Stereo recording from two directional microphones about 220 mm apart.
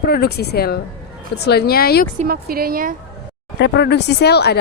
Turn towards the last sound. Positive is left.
turn(degrees=50)  # may be behind; listen again after turning